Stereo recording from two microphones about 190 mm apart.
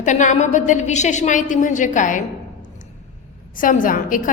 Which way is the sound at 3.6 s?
45° left (ahead or behind).